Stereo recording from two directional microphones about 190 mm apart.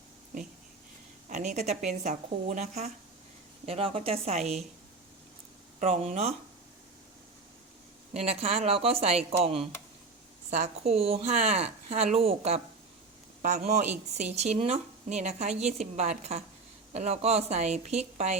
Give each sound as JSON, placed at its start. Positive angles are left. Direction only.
{"t": 1.3, "sound": "a woman's voice", "side_deg": -40}
{"t": 5.8, "sound": "a woman's voice", "side_deg": -40}
{"t": 8.1, "sound": "a woman's voice", "side_deg": -35}